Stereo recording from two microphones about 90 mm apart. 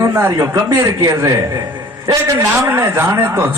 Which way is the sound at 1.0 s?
40° right (ahead or behind).